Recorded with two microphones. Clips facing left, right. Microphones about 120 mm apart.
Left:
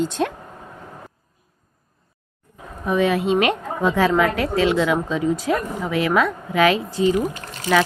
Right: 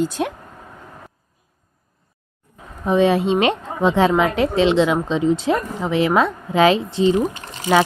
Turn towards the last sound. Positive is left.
turn(degrees=-25)  # may be behind; listen again after turning